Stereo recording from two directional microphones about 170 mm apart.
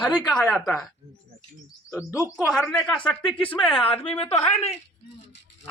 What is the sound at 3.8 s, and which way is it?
Speech, 35° left (ahead or behind).